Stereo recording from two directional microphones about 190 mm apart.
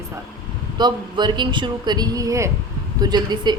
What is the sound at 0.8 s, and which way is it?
Speech, 25° right (ahead or behind).